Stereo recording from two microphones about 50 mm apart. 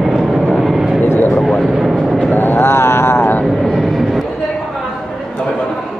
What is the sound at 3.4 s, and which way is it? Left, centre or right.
Vehicle, centre.